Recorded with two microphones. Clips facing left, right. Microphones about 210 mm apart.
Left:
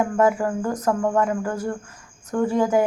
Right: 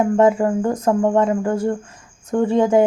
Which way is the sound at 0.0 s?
25° right (ahead or behind).